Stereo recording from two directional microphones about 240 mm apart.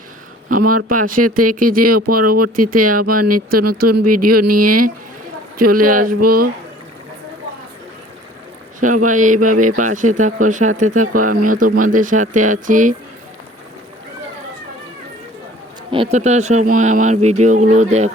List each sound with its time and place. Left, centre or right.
0.4 s speech: right
1.5 s speech: right
1.8 s speech: right
2.6 s speech: right
3.2 s speech: right
3.7 s speech: right
3.9 s speech: right
4.5 s speech: right
9.0 s speech: right
15.9 s speech: right